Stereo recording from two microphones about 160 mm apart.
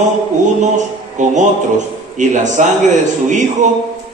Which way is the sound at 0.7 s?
50° right (ahead or behind).